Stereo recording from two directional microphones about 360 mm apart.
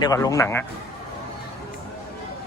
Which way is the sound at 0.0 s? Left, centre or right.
Centre.